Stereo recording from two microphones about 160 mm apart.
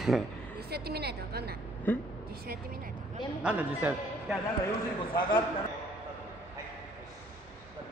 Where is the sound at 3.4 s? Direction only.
10° right (ahead or behind).